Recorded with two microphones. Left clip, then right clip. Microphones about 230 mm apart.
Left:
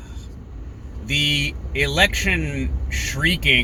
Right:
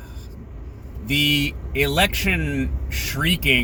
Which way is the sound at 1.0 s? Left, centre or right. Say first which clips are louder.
Even; centre.